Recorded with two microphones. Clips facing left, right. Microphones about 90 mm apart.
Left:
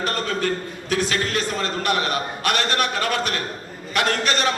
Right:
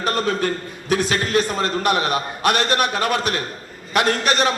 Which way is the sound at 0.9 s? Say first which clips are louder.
Right 3 dB; 20° right (ahead or behind).